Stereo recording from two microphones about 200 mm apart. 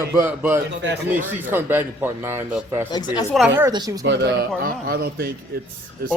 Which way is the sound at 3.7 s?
20° right (ahead or behind).